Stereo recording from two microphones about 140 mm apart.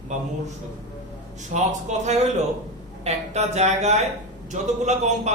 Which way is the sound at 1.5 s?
75° right (ahead or behind).